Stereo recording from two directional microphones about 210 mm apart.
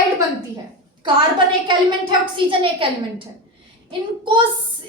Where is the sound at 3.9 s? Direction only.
25° right (ahead or behind).